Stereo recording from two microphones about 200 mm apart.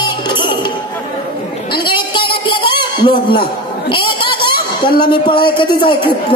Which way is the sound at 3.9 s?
25° left (ahead or behind).